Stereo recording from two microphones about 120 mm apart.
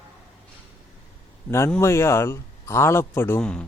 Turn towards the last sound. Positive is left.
turn(degrees=10)  # may be behind; listen again after turning